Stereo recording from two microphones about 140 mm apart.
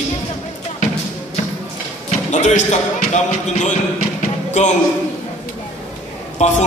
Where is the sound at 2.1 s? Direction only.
55° left (ahead or behind).